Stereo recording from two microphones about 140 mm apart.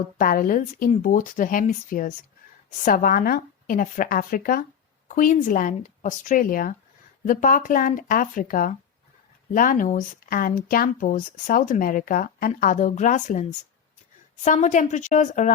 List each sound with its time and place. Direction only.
0.2 s speech: 90° left
2.8 s a woman's voice: 90° left
5.0 s speech: 70° left (ahead or behind)
14.4 s a woman's voice: 65° left (ahead or behind)